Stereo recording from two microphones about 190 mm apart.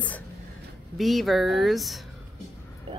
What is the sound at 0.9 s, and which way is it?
Speech, centre (ahead or behind).